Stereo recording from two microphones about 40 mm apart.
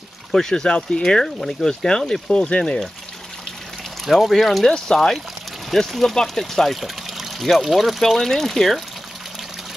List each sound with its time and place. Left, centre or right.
0.3 s speech: centre
4.0 s speech: centre
4.6 s speech: centre
5.7 s speech: centre
6.8 s trickle: centre
7.4 s speech: centre